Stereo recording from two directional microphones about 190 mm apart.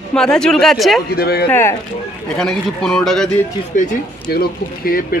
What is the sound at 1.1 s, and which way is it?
Speech, 55° left (ahead or behind).